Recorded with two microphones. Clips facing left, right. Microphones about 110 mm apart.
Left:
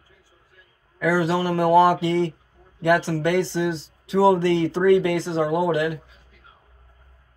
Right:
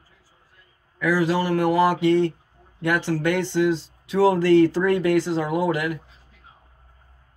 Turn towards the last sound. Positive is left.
turn(degrees=30)  # may be behind; listen again after turning